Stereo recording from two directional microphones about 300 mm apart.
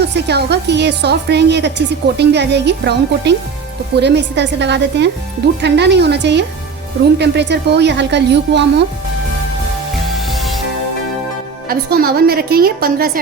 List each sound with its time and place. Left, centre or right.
0.0 s a woman's voice: right
10.2 s music: centre
11.7 s a woman's voice: right